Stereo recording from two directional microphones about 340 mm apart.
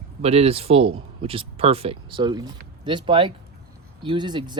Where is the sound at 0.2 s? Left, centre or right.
Centre.